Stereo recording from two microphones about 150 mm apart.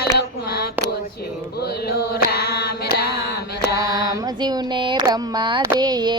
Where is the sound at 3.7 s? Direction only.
25° right (ahead or behind).